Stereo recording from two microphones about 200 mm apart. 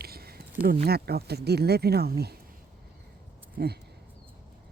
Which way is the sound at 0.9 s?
50° right (ahead or behind).